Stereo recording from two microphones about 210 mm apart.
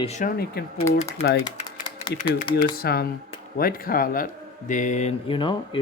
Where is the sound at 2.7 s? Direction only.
45° left (ahead or behind).